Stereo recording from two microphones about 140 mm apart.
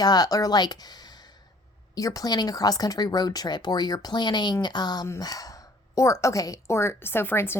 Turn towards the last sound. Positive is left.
turn(degrees=15)  # may be behind; listen again after turning